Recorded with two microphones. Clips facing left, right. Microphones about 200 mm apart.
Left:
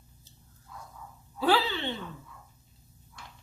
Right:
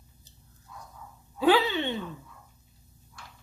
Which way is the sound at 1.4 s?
15° right (ahead or behind).